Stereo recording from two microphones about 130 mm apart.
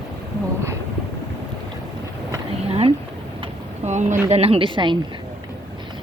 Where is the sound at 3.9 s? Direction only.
65° right (ahead or behind).